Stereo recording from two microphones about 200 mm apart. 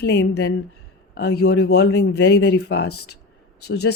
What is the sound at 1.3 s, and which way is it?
Speech, 90° left.